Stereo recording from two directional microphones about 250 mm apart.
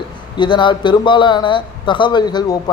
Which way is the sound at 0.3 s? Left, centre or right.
Centre.